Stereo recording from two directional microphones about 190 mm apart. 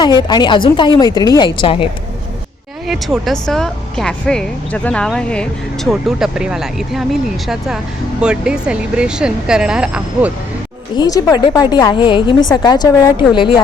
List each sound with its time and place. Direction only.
0.0 s speech: 20° left (ahead or behind)
2.8 s speech: centre (ahead or behind)
10.9 s speech: 20° left (ahead or behind)